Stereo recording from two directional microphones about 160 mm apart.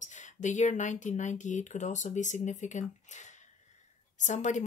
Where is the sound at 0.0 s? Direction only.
50° left (ahead or behind).